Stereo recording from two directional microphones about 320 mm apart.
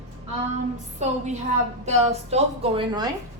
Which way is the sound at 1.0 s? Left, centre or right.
Right.